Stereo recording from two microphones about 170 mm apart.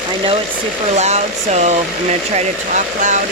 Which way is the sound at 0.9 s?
40° right (ahead or behind).